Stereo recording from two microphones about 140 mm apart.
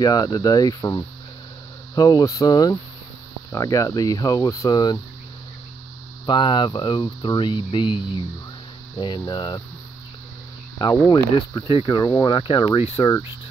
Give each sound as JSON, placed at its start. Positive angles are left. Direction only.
{"t": 0.0, "sound": "speech", "side_deg": 30}
{"t": 6.2, "sound": "speech", "side_deg": 35}
{"t": 10.8, "sound": "speech", "side_deg": 25}